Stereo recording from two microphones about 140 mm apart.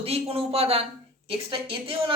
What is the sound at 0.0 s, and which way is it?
A woman's voice, 45° right (ahead or behind).